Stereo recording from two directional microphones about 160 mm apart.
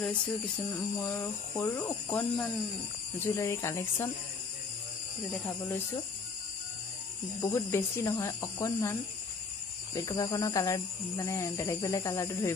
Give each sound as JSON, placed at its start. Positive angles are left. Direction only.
{"t": 0.7, "sound": "speech", "side_deg": 10}
{"t": 7.5, "sound": "speech", "side_deg": 15}
{"t": 9.9, "sound": "speech", "side_deg": 25}